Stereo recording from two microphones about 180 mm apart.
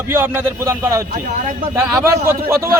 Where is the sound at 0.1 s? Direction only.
10° right (ahead or behind).